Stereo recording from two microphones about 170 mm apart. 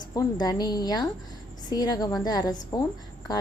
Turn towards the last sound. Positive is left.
turn(degrees=20)  # may be behind; listen again after turning